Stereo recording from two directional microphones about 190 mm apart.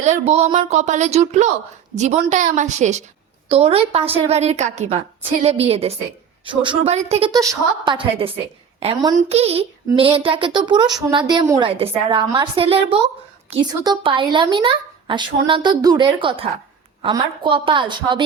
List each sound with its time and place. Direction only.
0.0 s a woman's voice: 35° right (ahead or behind)
7.3 s a woman's voice: 20° right (ahead or behind)
11.8 s a woman's voice: 30° right (ahead or behind)